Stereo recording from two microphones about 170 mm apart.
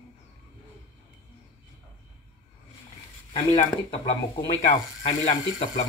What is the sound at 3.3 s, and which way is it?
Speech, 35° left (ahead or behind).